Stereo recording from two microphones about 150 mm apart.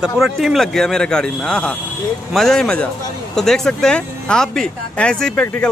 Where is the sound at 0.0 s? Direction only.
Centre (ahead or behind).